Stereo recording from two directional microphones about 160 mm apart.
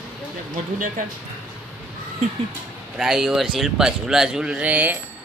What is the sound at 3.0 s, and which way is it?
Speech, 5° right (ahead or behind).